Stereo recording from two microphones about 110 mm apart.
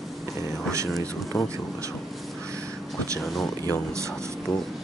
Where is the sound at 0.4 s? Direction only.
25° right (ahead or behind).